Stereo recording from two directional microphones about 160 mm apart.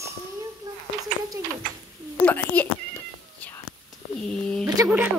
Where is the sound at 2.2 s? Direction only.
10° left (ahead or behind).